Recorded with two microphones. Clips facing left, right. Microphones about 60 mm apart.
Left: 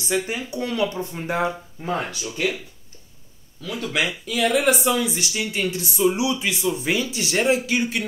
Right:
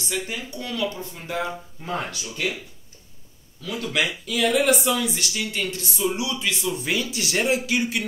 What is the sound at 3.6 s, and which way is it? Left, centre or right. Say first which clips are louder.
Speech: left 1 dB; centre.